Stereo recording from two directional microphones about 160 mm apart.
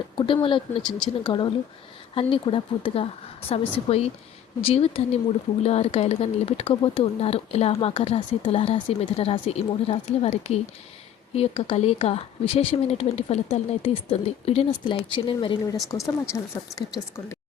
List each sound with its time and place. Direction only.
0.4 s speech: 35° left (ahead or behind)
0.8 s speech: 5° left (ahead or behind)
1.2 s speech: 30° left (ahead or behind)
15.6 s a woman's voice: 20° left (ahead or behind)